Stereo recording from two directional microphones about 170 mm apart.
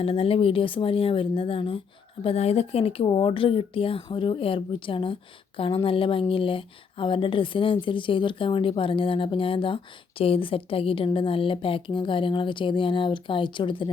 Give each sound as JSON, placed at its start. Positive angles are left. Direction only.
{"t": 0.0, "sound": "speech", "side_deg": 35}